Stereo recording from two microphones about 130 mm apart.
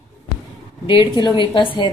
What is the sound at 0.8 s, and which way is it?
Speech, 40° left (ahead or behind).